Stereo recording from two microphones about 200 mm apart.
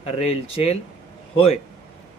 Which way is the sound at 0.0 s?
30° left (ahead or behind).